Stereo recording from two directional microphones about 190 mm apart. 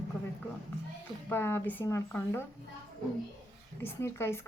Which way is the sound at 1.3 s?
10° left (ahead or behind).